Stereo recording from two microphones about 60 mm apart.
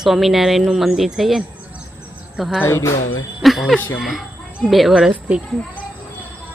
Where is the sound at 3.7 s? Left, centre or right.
Left.